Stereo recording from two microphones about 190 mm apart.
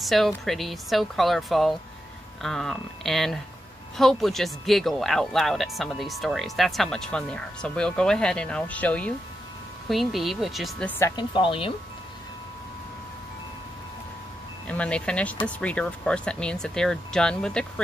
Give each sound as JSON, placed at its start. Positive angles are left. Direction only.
{"t": 0.0, "sound": "speech", "side_deg": 0}
{"t": 11.0, "sound": "speech", "side_deg": 20}
{"t": 14.7, "sound": "speech", "side_deg": 5}